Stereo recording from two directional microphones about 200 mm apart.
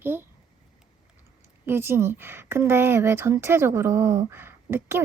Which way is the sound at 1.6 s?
10° right (ahead or behind).